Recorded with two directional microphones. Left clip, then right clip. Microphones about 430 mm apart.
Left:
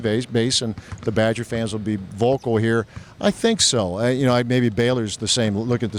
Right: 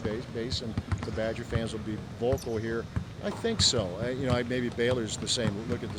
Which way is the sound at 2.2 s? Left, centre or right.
Left.